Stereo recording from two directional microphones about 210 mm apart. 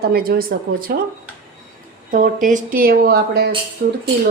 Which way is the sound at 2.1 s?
40° right (ahead or behind).